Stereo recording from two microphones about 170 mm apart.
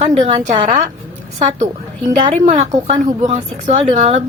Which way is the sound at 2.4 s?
45° right (ahead or behind).